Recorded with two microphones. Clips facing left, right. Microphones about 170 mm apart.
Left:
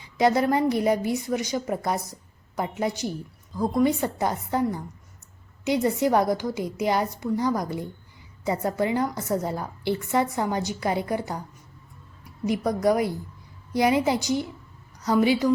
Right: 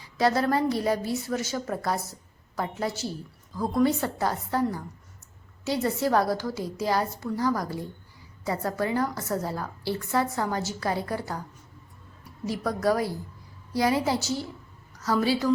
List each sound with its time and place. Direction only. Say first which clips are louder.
0.2 s a woman's voice: left 3 dB; 20° left (ahead or behind)